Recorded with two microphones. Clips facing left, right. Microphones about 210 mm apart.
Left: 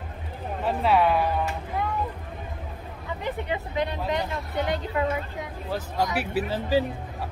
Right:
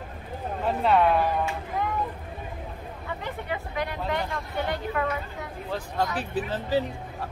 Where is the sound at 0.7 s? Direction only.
5° left (ahead or behind).